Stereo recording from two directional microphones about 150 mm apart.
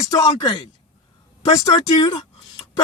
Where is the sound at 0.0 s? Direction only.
20° left (ahead or behind).